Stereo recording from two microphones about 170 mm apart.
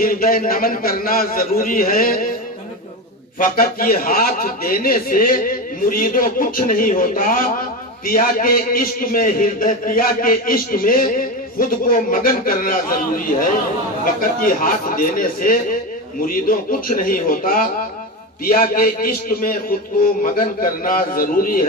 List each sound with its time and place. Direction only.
0.0 s a man's voice: 60° left (ahead or behind)
3.3 s a man's voice: 60° left (ahead or behind)